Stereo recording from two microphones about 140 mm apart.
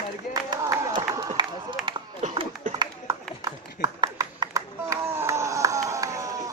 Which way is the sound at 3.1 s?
20° right (ahead or behind).